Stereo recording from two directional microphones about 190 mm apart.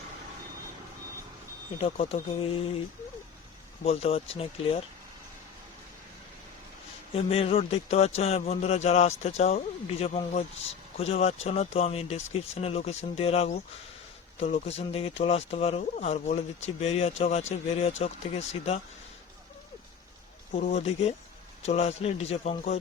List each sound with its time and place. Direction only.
1.8 s a man's voice: 30° left (ahead or behind)
3.8 s a man's voice: 30° left (ahead or behind)
7.1 s a man's voice: 30° left (ahead or behind)
20.5 s a man's voice: 40° left (ahead or behind)